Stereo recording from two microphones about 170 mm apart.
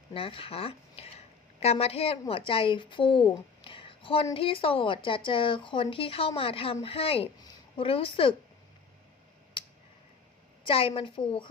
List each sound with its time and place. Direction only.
0.1 s a woman's voice: 30° left (ahead or behind)
9.6 s a sound: 30° left (ahead or behind)
10.6 s speech: 35° left (ahead or behind)